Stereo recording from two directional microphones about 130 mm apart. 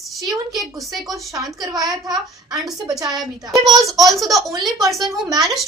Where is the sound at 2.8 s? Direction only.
30° right (ahead or behind).